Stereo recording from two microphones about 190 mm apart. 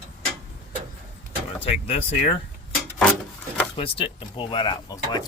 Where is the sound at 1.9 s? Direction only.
30° left (ahead or behind).